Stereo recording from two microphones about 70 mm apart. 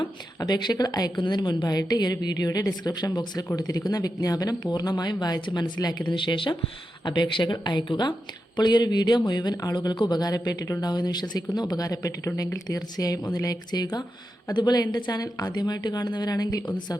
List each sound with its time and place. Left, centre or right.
0.3 s a woman's voice: left
7.0 s speech: left
13.7 s a woman's voice: left